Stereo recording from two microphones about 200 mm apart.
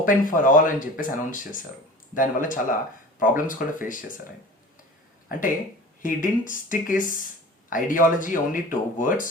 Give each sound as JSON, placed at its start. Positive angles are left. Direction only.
{"t": 0.0, "sound": "speech", "side_deg": 40}
{"t": 6.0, "sound": "speech", "side_deg": 40}